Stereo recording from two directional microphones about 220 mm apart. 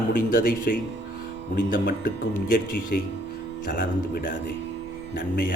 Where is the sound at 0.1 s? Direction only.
40° left (ahead or behind).